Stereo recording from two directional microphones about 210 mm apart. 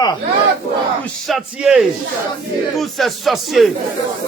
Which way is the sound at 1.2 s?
Centre (ahead or behind).